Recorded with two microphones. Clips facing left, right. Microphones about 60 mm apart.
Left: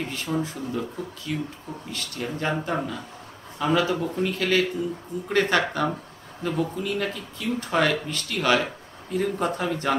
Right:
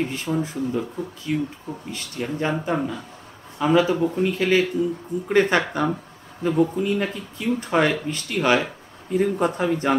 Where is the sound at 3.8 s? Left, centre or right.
Centre.